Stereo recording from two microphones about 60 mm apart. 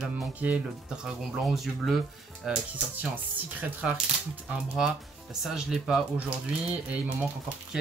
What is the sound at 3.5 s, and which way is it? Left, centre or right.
Speech, right.